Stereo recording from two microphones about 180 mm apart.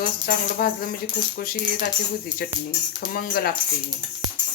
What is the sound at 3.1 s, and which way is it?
Speech, 55° left (ahead or behind).